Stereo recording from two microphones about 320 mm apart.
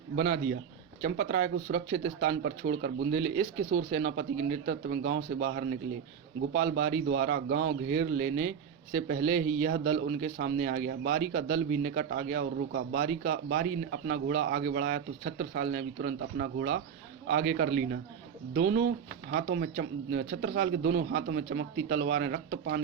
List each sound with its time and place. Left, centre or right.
0.2 s speech: right